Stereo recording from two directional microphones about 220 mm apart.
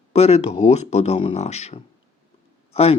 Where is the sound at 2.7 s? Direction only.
25° left (ahead or behind).